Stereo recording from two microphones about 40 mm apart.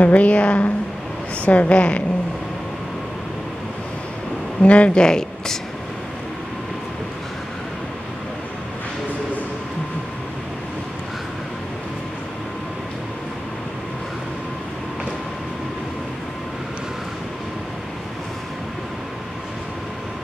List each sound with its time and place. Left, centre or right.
0.0 s a woman's voice: left
4.6 s speech: left